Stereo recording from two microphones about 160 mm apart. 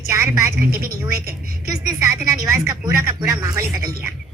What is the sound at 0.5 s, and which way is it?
Speech, 70° right (ahead or behind).